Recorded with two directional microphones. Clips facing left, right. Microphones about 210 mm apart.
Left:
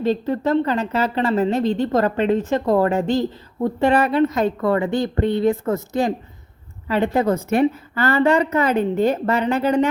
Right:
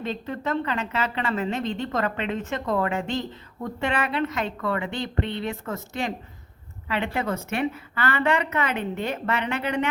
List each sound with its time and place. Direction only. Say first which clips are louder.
0.0 s a woman's voice: left 10 dB; 35° left (ahead or behind)